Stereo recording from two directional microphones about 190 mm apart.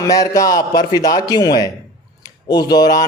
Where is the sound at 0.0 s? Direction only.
20° left (ahead or behind).